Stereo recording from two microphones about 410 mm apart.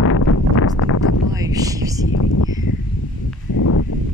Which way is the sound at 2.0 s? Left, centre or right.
Left.